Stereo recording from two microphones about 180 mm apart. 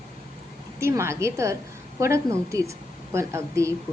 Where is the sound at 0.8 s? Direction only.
15° right (ahead or behind).